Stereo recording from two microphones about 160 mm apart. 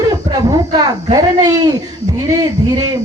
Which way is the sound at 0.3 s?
25° right (ahead or behind).